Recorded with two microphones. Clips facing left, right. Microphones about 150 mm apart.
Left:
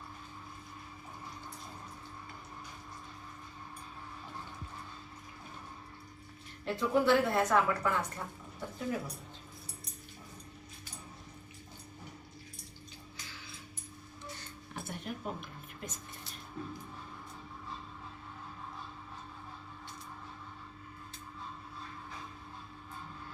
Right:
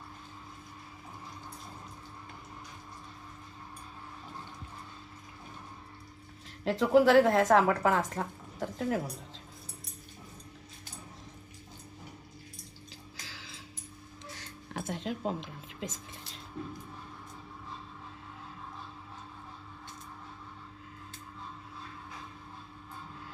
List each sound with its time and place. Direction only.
6.7 s a woman's voice: 90° right
7.5 s a woman's voice: 75° right (ahead or behind)
13.2 s music: 90° right